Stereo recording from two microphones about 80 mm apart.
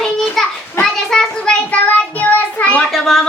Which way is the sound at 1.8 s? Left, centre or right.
Centre.